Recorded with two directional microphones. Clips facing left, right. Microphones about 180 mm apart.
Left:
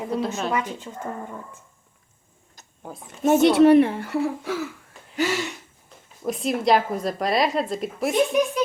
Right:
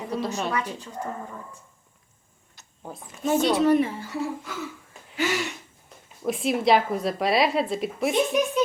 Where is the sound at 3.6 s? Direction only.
65° left (ahead or behind).